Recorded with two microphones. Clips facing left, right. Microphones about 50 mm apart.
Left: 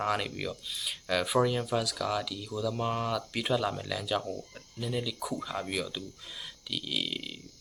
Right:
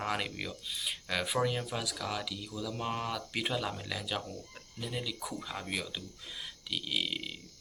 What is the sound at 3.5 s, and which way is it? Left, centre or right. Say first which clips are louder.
Speech: left 7 dB; centre.